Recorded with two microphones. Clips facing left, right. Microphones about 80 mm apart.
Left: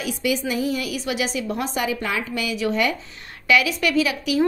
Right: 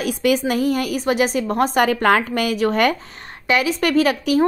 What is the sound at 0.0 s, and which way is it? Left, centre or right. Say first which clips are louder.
A woman's voice: right 5 dB; right.